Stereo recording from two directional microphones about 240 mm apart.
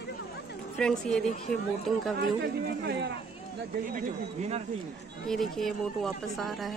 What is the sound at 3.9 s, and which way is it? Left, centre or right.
Speech, right.